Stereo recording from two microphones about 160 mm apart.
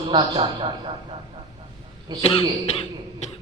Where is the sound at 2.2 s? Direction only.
35° left (ahead or behind).